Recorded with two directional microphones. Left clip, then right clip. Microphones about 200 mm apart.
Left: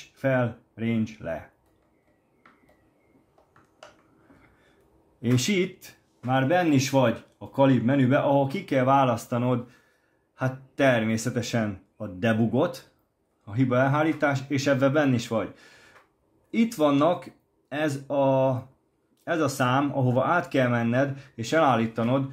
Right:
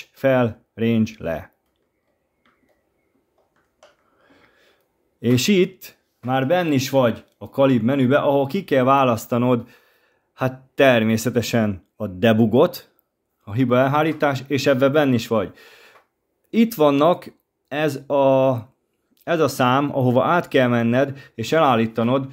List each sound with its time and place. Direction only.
0.1 s speech: 50° right (ahead or behind)
5.2 s speech: 45° right (ahead or behind)